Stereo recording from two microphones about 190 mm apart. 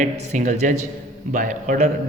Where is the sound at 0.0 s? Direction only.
40° right (ahead or behind).